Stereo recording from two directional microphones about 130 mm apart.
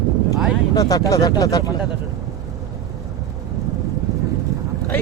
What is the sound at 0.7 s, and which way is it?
Speech, 30° left (ahead or behind).